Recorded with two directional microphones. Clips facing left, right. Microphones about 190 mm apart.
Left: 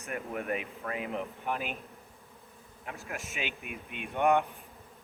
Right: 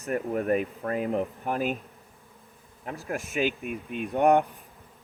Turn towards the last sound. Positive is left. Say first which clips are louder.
# right 5 dB
turn(degrees=-40)  # may be behind; listen again after turning